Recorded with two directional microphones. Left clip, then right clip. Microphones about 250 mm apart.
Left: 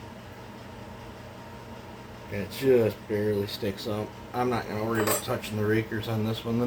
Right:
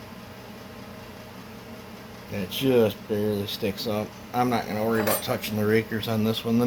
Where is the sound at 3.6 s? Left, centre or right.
Right.